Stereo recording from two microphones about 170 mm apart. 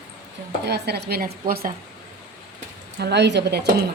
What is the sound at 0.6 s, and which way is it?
A woman's voice, 75° right (ahead or behind).